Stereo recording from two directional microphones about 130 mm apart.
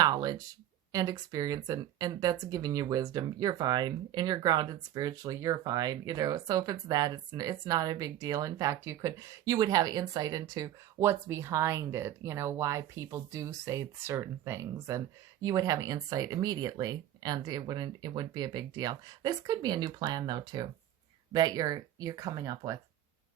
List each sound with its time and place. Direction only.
0.0 s speech: 30° right (ahead or behind)